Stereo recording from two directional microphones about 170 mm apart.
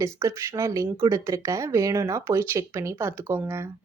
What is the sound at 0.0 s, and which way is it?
A woman's voice, 20° right (ahead or behind).